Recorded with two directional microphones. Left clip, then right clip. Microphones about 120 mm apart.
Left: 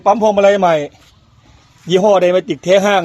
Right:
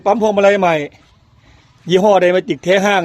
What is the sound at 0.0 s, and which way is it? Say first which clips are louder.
Speech: left 2 dB; 20° right (ahead or behind).